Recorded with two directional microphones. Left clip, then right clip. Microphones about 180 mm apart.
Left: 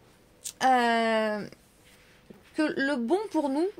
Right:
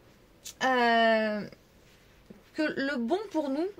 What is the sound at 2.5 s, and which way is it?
Speech, 45° left (ahead or behind).